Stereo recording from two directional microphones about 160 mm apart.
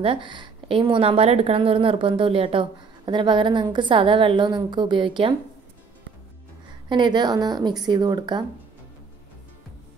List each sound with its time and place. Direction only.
0.0 s a woman's voice: 30° right (ahead or behind)
6.9 s a woman's voice: 30° right (ahead or behind)